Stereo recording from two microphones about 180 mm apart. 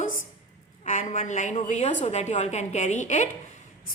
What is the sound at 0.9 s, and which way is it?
A woman's voice, 40° left (ahead or behind).